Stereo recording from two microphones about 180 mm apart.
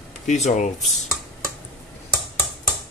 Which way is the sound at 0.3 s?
40° left (ahead or behind).